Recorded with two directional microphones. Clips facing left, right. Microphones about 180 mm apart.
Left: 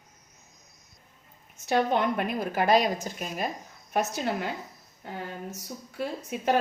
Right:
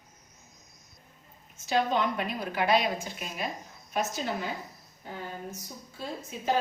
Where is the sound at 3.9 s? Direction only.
60° left (ahead or behind).